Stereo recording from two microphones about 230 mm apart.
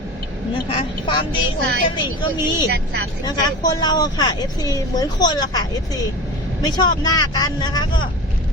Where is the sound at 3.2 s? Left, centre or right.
Centre.